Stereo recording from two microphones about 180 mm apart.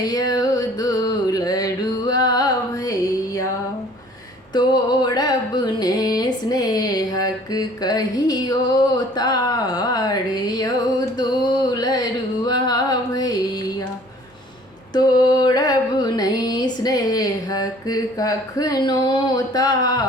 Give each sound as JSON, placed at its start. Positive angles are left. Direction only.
{"t": 0.0, "sound": "music", "side_deg": 20}
{"t": 4.5, "sound": "music", "side_deg": 25}
{"t": 11.2, "sound": "a sound", "side_deg": 25}
{"t": 14.9, "sound": "music", "side_deg": 20}